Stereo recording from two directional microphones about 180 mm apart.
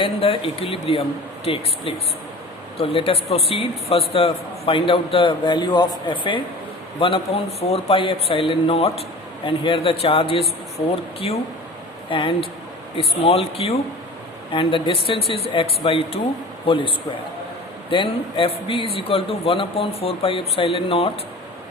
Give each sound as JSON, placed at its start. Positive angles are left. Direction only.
{"t": 0.0, "sound": "a man's voice", "side_deg": 30}
{"t": 2.7, "sound": "a man's voice", "side_deg": 30}
{"t": 12.0, "sound": "a man's voice", "side_deg": 30}
{"t": 17.9, "sound": "a man's voice", "side_deg": 30}